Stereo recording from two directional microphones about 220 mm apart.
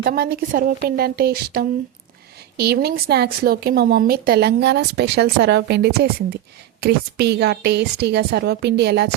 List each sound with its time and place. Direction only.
0.0 s speech: 40° right (ahead or behind)